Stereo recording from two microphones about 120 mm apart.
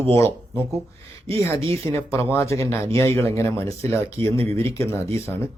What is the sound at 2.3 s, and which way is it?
Speech, 25° left (ahead or behind).